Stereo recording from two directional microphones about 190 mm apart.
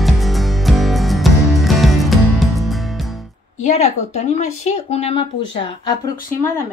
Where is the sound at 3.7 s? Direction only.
35° left (ahead or behind).